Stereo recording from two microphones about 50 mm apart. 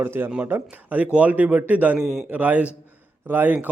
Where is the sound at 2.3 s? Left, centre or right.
Right.